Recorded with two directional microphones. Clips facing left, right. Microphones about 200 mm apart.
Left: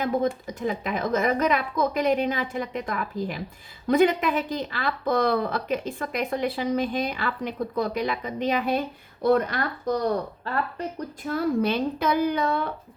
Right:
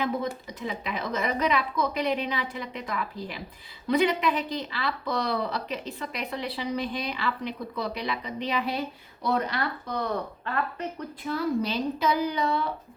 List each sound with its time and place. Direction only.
0.0 s a woman's voice: 45° left (ahead or behind)
11.3 s speech: 55° left (ahead or behind)